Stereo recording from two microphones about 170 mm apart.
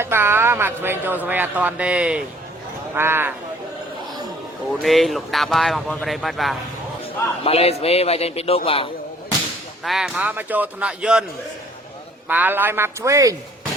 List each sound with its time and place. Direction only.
0.0 s a man's voice: 15° right (ahead or behind)
4.8 s speech: centre (ahead or behind)
7.4 s a man's voice: 35° left (ahead or behind)
9.8 s a man's voice: centre (ahead or behind)
12.3 s a man's voice: 10° right (ahead or behind)